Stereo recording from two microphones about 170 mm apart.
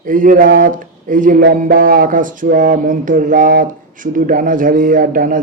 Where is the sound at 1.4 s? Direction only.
65° right (ahead or behind).